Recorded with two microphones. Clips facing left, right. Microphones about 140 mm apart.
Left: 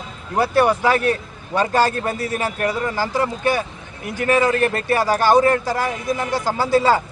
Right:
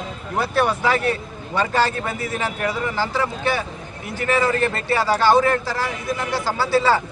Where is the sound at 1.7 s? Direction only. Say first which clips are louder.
Left 3 dB; 45° left (ahead or behind).